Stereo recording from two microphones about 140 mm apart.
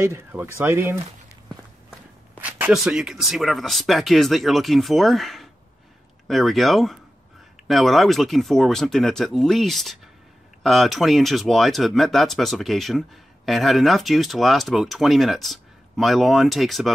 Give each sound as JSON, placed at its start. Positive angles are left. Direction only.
{"t": 0.0, "sound": "speech", "side_deg": -20}
{"t": 1.9, "sound": "shuffling cards", "side_deg": -10}
{"t": 2.7, "sound": "speech", "side_deg": 0}